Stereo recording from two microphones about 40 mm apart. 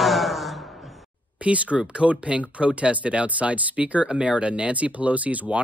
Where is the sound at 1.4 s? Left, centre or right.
Right.